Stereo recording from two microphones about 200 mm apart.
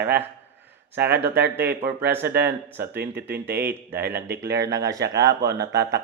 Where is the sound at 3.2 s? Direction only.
10° right (ahead or behind).